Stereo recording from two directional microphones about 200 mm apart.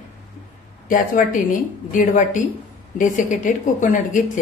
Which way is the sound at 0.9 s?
45° left (ahead or behind).